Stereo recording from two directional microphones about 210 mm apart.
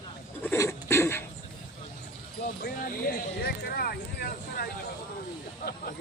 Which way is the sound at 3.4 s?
45° left (ahead or behind).